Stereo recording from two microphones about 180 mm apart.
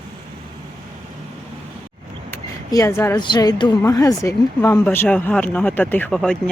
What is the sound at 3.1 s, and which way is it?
A woman's voice, 25° left (ahead or behind).